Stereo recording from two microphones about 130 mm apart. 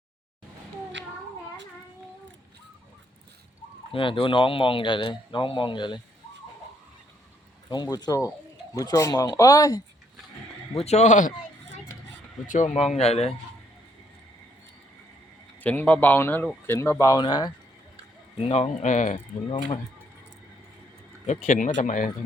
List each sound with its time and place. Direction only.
3.9 s speech: 40° left (ahead or behind)
7.7 s speech: 30° left (ahead or behind)
10.8 s speech: 55° left (ahead or behind); by 11.3 s 75° left (ahead or behind)
12.5 s speech: 65° left (ahead or behind); by 13.3 s 50° left (ahead or behind)
15.6 s speech: 15° left (ahead or behind); by 17.5 s 35° left (ahead or behind)
18.3 s speech: 55° left (ahead or behind); by 19.2 s 70° left (ahead or behind)
21.4 s speech: 85° left